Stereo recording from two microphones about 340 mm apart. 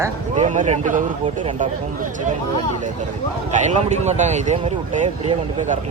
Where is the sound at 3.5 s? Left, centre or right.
Right.